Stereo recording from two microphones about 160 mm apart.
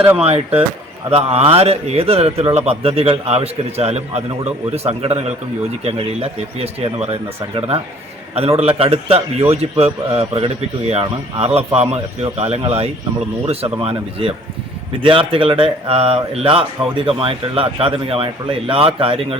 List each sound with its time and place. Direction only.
0.2 s speech: 40° right (ahead or behind)